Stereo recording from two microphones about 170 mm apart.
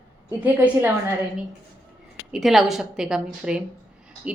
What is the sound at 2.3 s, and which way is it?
A woman's voice, centre (ahead or behind).